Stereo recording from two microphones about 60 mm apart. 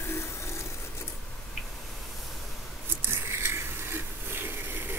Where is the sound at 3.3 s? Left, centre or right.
Right.